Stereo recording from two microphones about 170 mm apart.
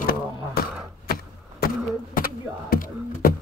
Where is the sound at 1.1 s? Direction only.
60° left (ahead or behind).